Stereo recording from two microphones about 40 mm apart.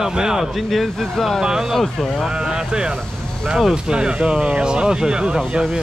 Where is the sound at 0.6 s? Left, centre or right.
Centre.